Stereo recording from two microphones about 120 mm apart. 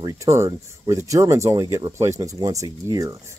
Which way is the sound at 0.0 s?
25° right (ahead or behind).